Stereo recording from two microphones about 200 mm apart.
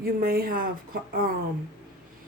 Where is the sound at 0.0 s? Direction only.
45° right (ahead or behind).